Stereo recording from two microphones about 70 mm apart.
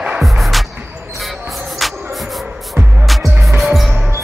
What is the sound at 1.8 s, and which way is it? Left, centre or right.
Music, centre.